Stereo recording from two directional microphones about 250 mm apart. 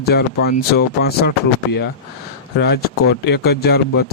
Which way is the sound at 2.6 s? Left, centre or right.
Left.